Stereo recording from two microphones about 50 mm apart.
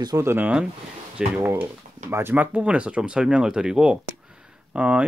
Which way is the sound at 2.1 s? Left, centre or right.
Right.